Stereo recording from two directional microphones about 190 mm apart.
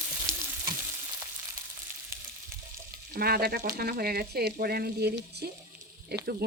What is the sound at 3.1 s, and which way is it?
Speech, 55° right (ahead or behind).